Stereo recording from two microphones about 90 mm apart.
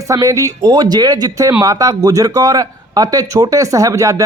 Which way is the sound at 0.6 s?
55° right (ahead or behind).